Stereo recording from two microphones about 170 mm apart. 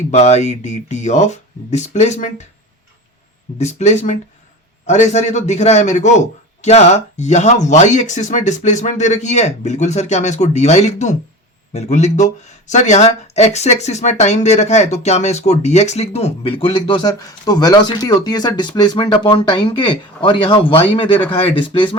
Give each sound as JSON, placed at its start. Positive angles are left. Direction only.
{"t": 0.1, "sound": "a man's voice", "side_deg": 40}
{"t": 3.6, "sound": "a man's voice", "side_deg": 40}